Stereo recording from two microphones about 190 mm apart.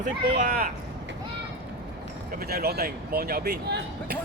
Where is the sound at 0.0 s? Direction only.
45° right (ahead or behind).